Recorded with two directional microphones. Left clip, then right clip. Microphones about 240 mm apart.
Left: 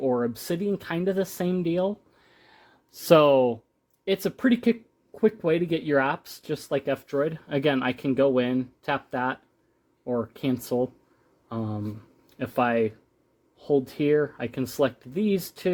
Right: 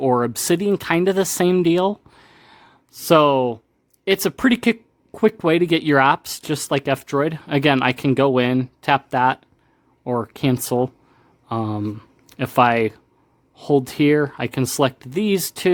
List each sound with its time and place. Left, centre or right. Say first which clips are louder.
0.0 s speech: right 7 dB; right
2.3 s a sound: right 3 dB; centre
4.0 s speech: right 7 dB; right